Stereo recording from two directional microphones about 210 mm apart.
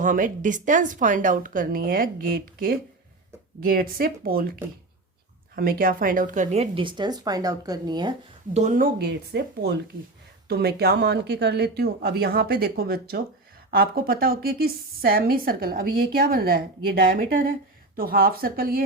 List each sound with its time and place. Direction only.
0.0 s a woman's voice: 40° right (ahead or behind)
5.5 s a woman's voice: 45° right (ahead or behind); by 8.1 s 20° right (ahead or behind)
8.5 s a woman's voice: 35° right (ahead or behind)